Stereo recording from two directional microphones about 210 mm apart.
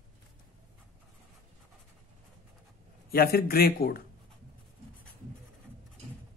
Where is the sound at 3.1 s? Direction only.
45° left (ahead or behind).